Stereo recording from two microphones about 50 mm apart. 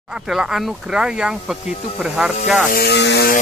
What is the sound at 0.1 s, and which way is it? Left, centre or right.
Speech, centre.